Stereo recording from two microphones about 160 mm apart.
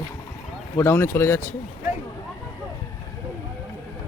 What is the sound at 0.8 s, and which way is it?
Speech, 15° left (ahead or behind).